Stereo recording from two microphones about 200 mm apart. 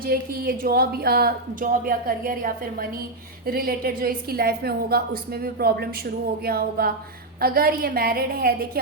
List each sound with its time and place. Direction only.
0.0 s a woman's voice: 45° right (ahead or behind)